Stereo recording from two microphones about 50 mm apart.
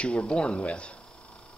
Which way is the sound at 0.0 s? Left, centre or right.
Left.